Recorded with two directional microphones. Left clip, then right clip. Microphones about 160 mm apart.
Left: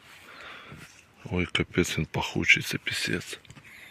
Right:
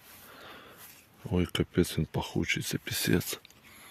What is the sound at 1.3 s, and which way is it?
Speech, 25° right (ahead or behind).